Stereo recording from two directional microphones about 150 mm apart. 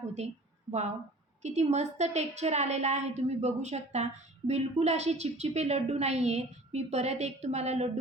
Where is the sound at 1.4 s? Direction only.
50° right (ahead or behind).